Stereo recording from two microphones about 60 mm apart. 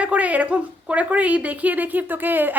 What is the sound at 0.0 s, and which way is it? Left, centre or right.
A woman's voice, right.